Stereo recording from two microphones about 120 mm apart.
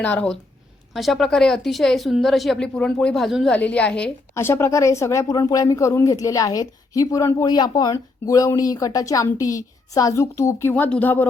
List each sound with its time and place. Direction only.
0.0 s a woman's voice: 10° left (ahead or behind)
0.9 s a woman's voice: centre (ahead or behind)
4.4 s speech: 20° left (ahead or behind)